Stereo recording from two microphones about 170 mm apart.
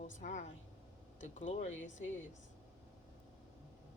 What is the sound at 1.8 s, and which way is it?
Speech, 90° left.